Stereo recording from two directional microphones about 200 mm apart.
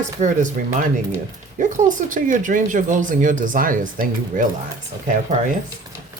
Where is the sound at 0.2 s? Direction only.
40° right (ahead or behind).